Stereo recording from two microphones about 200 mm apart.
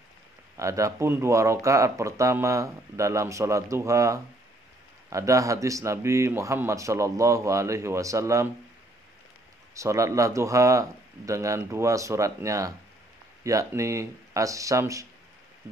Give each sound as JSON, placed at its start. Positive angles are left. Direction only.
{"t": 0.6, "sound": "speech", "side_deg": -15}
{"t": 9.8, "sound": "speech", "side_deg": -15}